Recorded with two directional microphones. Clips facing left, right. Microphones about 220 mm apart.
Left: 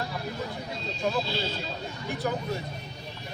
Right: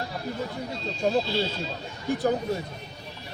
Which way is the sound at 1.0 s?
35° right (ahead or behind).